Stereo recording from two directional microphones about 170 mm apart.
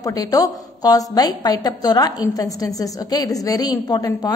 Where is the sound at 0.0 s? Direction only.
20° left (ahead or behind).